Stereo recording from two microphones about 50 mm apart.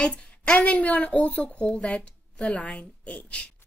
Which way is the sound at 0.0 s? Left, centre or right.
Left.